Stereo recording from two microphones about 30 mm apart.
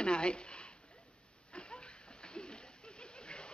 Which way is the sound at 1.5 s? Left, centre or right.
Left.